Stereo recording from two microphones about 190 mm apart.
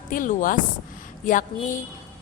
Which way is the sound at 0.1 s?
45° left (ahead or behind).